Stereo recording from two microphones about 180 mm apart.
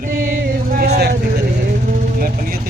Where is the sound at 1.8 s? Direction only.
45° right (ahead or behind).